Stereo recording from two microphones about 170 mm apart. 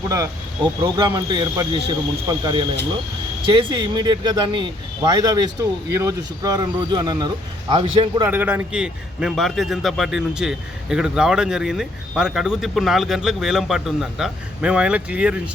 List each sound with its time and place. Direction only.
0.1 s speech: 20° right (ahead or behind)
8.3 s a man's voice: 10° right (ahead or behind)